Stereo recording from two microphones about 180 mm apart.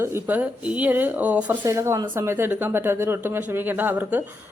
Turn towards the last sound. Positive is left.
turn(degrees=-10)  # may be behind; listen again after turning